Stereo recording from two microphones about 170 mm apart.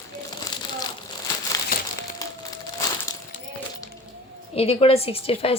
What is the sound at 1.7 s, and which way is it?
Crumpling, 55° left (ahead or behind).